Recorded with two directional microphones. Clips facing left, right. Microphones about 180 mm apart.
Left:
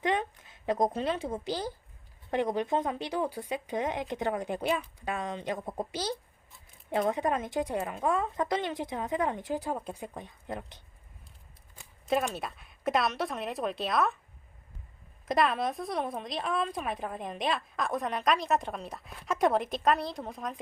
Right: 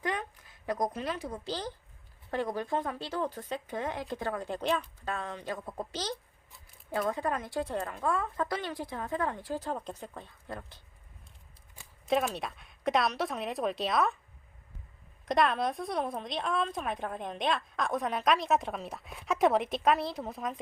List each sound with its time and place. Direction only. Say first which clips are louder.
0.0 s a sound: left 5 dB; 25° left (ahead or behind)
1.5 s speech: left 3 dB; 10° left (ahead or behind)
12.0 s a woman's voice: even; centre (ahead or behind)
15.3 s a woman's voice: even; centre (ahead or behind)